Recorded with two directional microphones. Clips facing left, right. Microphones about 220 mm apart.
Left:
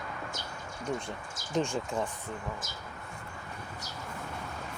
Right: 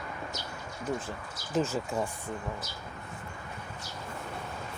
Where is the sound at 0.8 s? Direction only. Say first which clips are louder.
Right 1 dB; 5° right (ahead or behind).